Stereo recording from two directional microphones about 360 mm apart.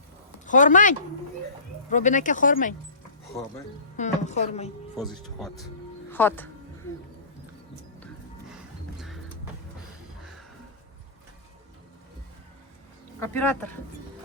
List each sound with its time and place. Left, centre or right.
0.4 s speech: left
3.9 s speech: centre
6.1 s speech: centre
9.0 s vehicle: centre
13.1 s speech: centre